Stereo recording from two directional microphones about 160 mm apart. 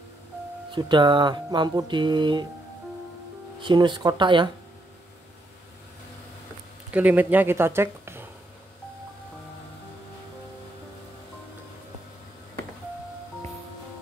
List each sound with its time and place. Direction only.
0.7 s music: 30° right (ahead or behind)
3.6 s music: 30° right (ahead or behind)
6.9 s speech: 10° right (ahead or behind)